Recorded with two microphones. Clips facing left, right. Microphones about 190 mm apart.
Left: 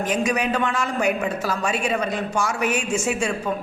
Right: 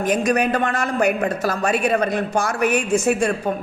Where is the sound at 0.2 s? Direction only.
55° right (ahead or behind).